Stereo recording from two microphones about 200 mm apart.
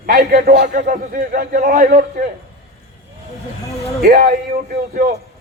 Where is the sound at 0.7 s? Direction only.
40° right (ahead or behind).